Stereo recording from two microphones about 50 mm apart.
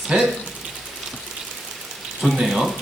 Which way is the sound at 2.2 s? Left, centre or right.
Centre.